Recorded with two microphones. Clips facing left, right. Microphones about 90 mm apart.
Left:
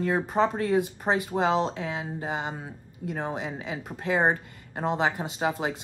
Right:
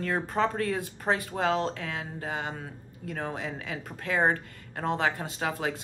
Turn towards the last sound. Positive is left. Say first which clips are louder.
# left 3 dB
turn(degrees=20)  # may be behind; listen again after turning